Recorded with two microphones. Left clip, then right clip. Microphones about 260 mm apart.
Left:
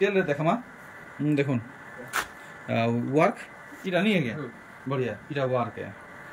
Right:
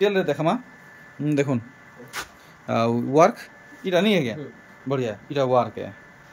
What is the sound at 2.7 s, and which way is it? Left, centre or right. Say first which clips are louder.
Speech: right 4 dB; centre.